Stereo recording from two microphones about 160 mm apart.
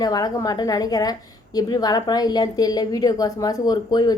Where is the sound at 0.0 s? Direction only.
25° left (ahead or behind).